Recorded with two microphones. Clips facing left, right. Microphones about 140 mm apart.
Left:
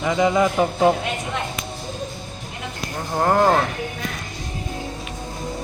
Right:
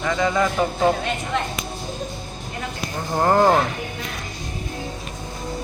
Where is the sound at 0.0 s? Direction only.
20° left (ahead or behind).